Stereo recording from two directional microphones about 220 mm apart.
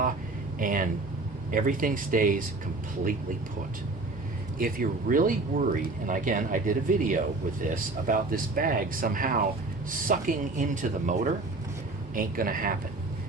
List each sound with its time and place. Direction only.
0.6 s speech: 40° right (ahead or behind)
4.5 s speech: 40° right (ahead or behind)